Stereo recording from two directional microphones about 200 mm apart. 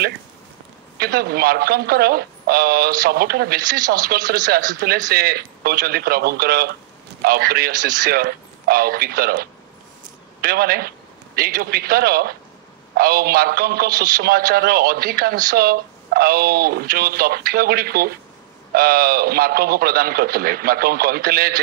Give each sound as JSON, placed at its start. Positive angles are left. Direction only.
{"t": 0.9, "sound": "a man's voice", "side_deg": -50}